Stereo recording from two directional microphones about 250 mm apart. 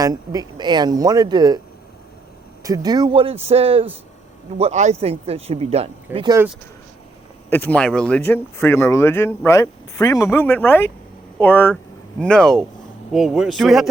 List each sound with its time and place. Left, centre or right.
0.0 s speech: centre
2.6 s speech: centre
6.1 s speech: centre
7.5 s speech: centre